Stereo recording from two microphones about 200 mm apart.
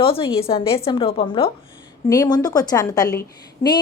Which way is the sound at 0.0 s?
25° left (ahead or behind).